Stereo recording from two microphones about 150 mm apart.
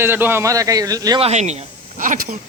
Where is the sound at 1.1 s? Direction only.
45° right (ahead or behind); by 2.3 s 60° right (ahead or behind).